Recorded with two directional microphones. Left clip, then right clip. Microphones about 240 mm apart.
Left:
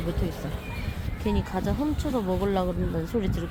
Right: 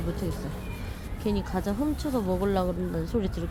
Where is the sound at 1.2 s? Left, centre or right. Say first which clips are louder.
Left 1 dB; centre.